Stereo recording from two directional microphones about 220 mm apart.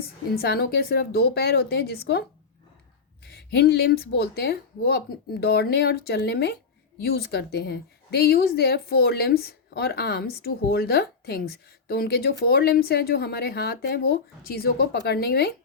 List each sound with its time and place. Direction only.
0.3 s a woman's voice: 45° left (ahead or behind)
3.2 s a woman's voice: 45° left (ahead or behind)